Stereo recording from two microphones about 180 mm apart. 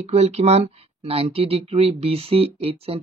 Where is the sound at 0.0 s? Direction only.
35° right (ahead or behind).